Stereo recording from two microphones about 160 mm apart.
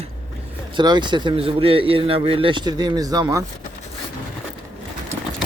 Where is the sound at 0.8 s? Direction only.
30° right (ahead or behind).